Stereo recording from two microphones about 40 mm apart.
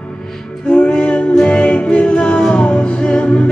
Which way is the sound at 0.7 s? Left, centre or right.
Left.